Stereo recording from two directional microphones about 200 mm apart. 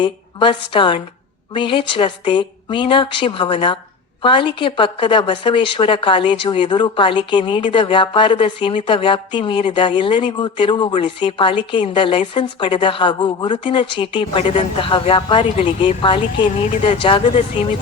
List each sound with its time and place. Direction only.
0.0 s speech: 25° left (ahead or behind)